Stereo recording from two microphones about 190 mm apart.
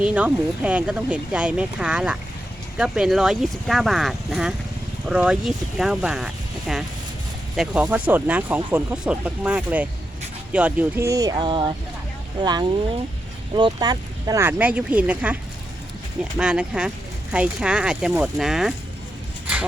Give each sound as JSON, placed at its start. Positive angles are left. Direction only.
{"t": 0.0, "sound": "speech", "side_deg": -5}
{"t": 16.4, "sound": "speech", "side_deg": -5}